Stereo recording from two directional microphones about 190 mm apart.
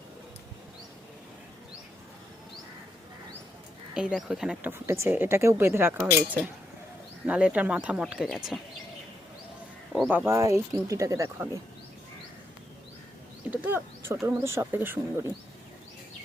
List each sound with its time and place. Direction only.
3.9 s speech: 5° right (ahead or behind)
7.3 s speech: 5° right (ahead or behind)
9.9 s speech: 10° right (ahead or behind)
13.5 s speech: 10° right (ahead or behind)